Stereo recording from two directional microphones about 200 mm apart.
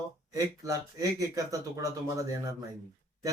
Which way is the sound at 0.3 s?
15° right (ahead or behind).